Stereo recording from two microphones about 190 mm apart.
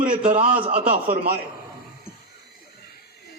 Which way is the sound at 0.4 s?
30° right (ahead or behind).